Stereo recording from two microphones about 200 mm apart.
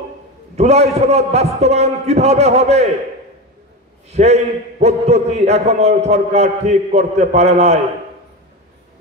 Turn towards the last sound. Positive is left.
turn(degrees=-35)  # may be behind; listen again after turning